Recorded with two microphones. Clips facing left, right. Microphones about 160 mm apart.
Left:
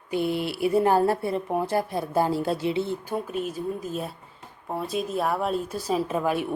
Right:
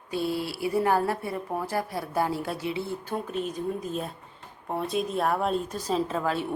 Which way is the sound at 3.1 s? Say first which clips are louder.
Left 2 dB; 5° left (ahead or behind).